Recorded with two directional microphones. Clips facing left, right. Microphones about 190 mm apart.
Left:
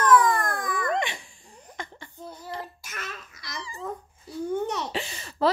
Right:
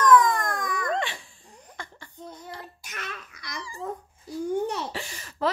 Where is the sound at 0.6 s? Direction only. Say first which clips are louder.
Left 1 dB; 5° left (ahead or behind).